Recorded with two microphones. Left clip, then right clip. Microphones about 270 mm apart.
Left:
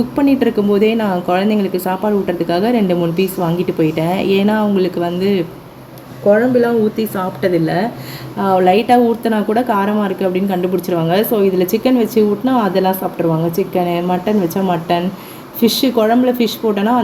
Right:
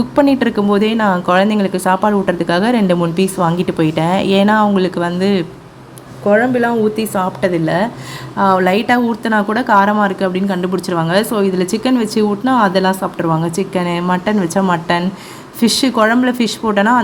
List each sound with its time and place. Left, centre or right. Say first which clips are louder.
0.2 s speech: right 2 dB; centre